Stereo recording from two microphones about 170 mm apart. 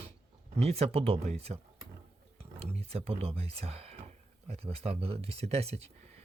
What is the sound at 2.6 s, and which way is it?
Speech, 35° right (ahead or behind).